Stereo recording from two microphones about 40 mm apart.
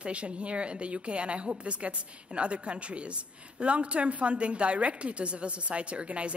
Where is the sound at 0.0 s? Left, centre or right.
Right.